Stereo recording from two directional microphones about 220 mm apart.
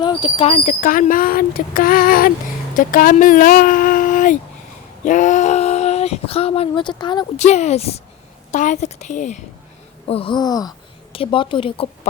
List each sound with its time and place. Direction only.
0.0 s speech: 20° left (ahead or behind)
7.3 s speech: 30° left (ahead or behind)